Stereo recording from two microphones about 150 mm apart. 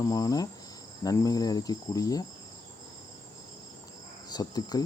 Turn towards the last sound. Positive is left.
turn(degrees=25)  # may be behind; listen again after turning